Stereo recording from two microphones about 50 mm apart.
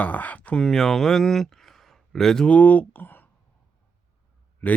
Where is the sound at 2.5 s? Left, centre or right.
Left.